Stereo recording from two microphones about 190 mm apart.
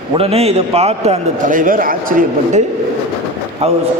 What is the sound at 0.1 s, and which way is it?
A man's voice, 30° right (ahead or behind).